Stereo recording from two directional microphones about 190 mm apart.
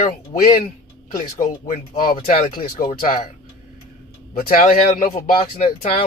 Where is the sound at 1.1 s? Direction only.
40° left (ahead or behind).